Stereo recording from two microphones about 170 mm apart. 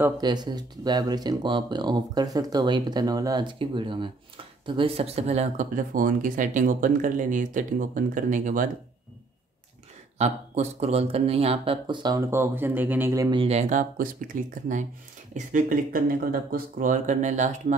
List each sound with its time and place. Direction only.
0.2 s speech: 25° right (ahead or behind); by 8.6 s 50° right (ahead or behind)
10.1 s speech: 40° right (ahead or behind); by 13.4 s 20° right (ahead or behind)
13.4 s speech: 40° right (ahead or behind)